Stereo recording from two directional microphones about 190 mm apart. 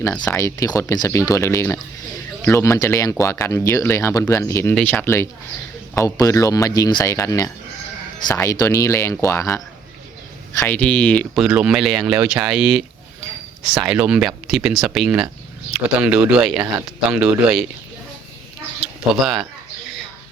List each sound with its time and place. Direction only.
0.0 s speech: 15° left (ahead or behind)
10.6 s speech: 10° left (ahead or behind)
19.2 s speech: centre (ahead or behind)